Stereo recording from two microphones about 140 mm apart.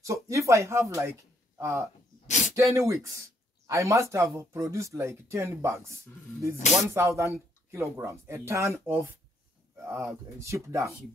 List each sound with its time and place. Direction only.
0.0 s speech: 20° right (ahead or behind)
2.2 s a sound: 60° left (ahead or behind)
2.5 s speech: 20° right (ahead or behind)
6.9 s speech: 20° right (ahead or behind)